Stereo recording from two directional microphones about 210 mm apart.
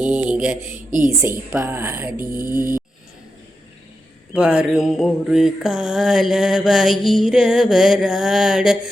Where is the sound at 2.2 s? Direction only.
45° right (ahead or behind).